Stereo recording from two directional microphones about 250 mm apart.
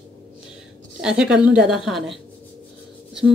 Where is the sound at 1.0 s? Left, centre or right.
Centre.